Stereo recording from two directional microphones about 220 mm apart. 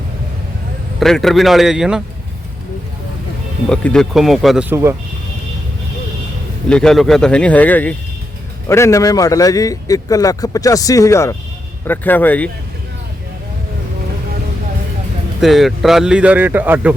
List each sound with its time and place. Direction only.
0.9 s speech: centre (ahead or behind)
3.7 s speech: 5° left (ahead or behind)
4.7 s speech: 10° right (ahead or behind)
6.7 s a man's voice: 5° left (ahead or behind)
15.4 s speech: centre (ahead or behind)